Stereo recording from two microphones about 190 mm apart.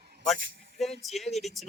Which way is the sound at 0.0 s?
60° right (ahead or behind).